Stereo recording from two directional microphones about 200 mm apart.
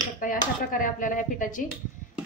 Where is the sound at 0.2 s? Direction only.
45° left (ahead or behind).